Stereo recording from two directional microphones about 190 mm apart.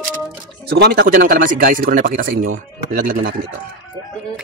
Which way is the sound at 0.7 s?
60° right (ahead or behind).